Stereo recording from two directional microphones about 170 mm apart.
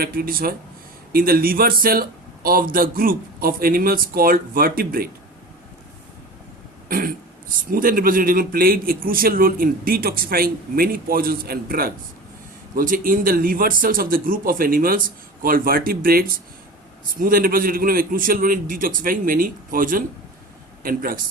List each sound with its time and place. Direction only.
0.0 s a man's voice: 60° right (ahead or behind)
6.8 s a man's voice: 55° right (ahead or behind)